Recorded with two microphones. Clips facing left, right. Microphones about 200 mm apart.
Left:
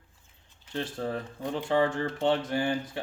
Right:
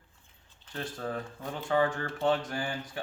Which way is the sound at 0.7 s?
25° left (ahead or behind).